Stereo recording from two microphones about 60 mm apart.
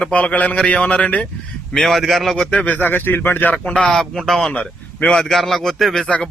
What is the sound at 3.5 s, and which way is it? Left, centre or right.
Speech, centre.